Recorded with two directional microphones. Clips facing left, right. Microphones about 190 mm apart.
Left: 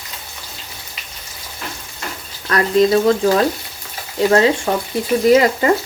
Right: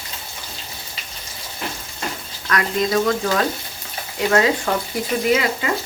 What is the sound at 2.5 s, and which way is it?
Speech, 30° left (ahead or behind).